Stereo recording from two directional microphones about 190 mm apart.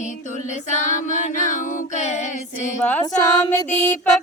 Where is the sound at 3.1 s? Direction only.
20° left (ahead or behind).